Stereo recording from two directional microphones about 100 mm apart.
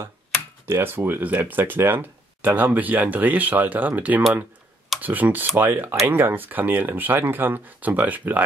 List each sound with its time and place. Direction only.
0.7 s speech: 20° right (ahead or behind)